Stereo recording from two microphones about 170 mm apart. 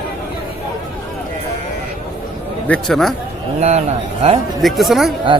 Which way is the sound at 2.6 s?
5° left (ahead or behind).